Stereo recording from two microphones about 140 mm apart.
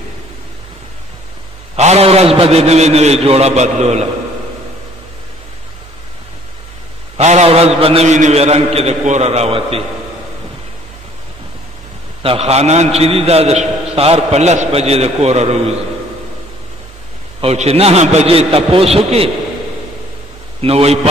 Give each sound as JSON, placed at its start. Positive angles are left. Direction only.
{"t": 1.8, "sound": "a man's voice", "side_deg": -50}
{"t": 7.2, "sound": "a man's voice", "side_deg": -55}
{"t": 12.2, "sound": "a man's voice", "side_deg": -45}
{"t": 17.4, "sound": "a man's voice", "side_deg": -45}
{"t": 20.6, "sound": "a man's voice", "side_deg": -45}